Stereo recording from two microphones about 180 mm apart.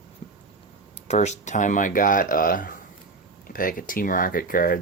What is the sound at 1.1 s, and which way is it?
Speech, 40° left (ahead or behind).